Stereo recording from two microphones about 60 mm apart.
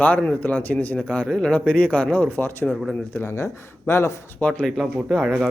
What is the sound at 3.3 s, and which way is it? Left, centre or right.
Speech, left.